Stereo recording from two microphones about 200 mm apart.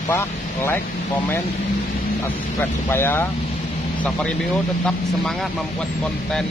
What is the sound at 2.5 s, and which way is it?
Speech, 10° left (ahead or behind).